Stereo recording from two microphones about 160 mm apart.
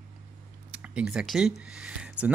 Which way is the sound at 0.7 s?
10° right (ahead or behind).